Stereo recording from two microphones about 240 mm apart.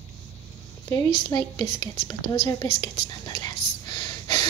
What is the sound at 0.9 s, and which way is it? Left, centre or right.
Speech, centre.